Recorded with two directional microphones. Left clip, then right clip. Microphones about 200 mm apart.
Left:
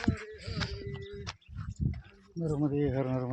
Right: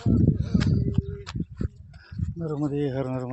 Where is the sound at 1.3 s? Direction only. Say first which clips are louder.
Right 7 dB; 40° right (ahead or behind).